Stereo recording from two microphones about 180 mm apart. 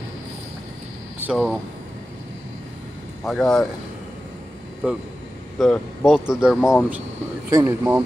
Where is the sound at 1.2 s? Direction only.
Centre (ahead or behind).